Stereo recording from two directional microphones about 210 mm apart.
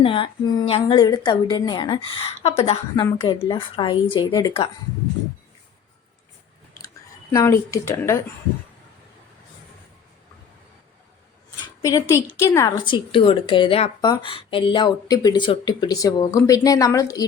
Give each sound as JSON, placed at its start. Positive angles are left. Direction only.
{"t": 0.0, "sound": "a woman's voice", "side_deg": 25}
{"t": 7.3, "sound": "speech", "side_deg": 15}
{"t": 11.6, "sound": "a sound", "side_deg": 20}
{"t": 12.4, "sound": "a woman's voice", "side_deg": 15}